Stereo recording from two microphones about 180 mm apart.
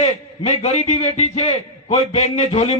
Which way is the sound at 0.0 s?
35° left (ahead or behind).